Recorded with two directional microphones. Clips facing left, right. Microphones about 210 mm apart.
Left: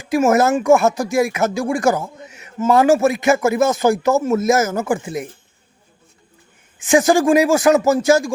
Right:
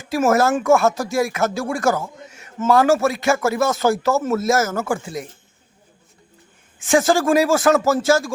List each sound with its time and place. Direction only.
0.0 s speech: 15° left (ahead or behind)
6.8 s speech: 15° left (ahead or behind)